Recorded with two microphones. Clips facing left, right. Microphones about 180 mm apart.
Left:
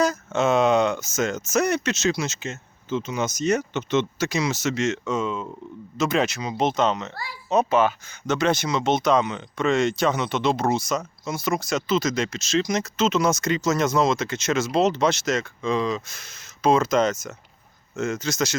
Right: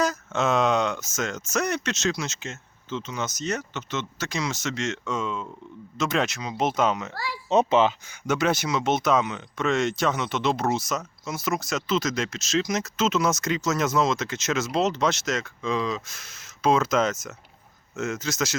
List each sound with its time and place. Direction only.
0.0 s speech: centre (ahead or behind)
4.3 s speech: 5° left (ahead or behind)
7.5 s speech: 20° right (ahead or behind)
8.3 s speech: 5° right (ahead or behind)